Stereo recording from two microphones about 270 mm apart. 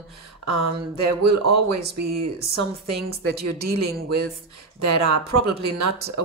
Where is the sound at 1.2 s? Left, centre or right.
Right.